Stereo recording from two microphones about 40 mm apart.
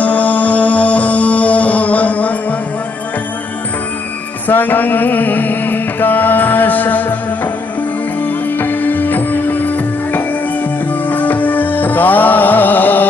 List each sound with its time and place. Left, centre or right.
0.0 s music: left
4.5 s music: left
8.5 s music: left